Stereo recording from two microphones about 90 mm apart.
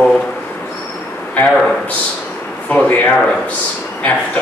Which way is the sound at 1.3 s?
20° left (ahead or behind).